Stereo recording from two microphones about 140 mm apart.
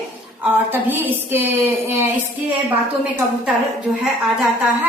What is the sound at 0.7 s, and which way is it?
Speech, 15° right (ahead or behind).